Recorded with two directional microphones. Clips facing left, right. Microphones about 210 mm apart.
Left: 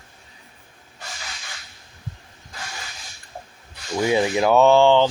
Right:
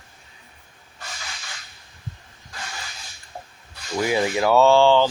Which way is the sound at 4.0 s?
20° left (ahead or behind).